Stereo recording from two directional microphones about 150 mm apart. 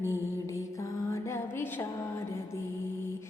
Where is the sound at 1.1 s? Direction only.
15° left (ahead or behind).